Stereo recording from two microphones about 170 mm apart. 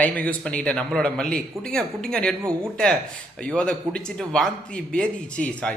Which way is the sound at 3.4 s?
5° left (ahead or behind).